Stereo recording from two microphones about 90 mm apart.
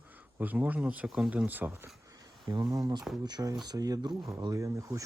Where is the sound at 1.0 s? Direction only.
5° right (ahead or behind).